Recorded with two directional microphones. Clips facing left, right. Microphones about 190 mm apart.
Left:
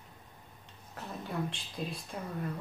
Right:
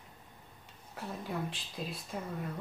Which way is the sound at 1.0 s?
Centre (ahead or behind).